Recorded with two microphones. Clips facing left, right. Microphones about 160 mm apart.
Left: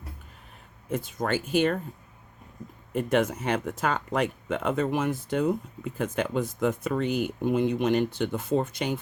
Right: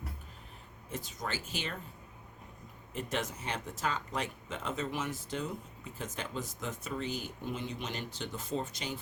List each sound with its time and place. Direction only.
0.9 s speech: 55° left (ahead or behind)
2.9 s speech: 55° left (ahead or behind)